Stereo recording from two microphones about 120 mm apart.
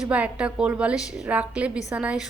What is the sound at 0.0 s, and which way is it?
A woman's voice, 10° right (ahead or behind).